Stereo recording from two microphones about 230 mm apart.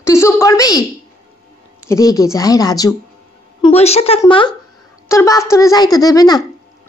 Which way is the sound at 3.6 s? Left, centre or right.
Left.